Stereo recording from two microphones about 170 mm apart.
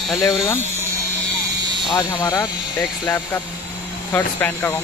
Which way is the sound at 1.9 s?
20° left (ahead or behind).